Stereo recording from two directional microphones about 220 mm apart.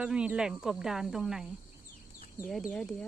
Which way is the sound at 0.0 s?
5° right (ahead or behind).